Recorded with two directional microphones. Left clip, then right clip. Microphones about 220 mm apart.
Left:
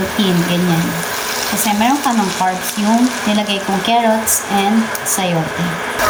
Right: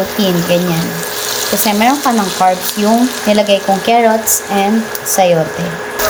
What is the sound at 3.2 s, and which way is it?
Speech, 20° right (ahead or behind).